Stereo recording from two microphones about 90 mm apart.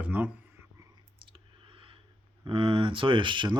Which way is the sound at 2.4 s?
70° right (ahead or behind).